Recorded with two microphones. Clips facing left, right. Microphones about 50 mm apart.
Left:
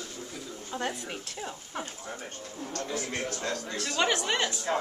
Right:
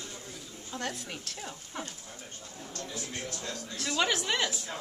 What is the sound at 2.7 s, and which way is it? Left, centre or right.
A man's voice, left.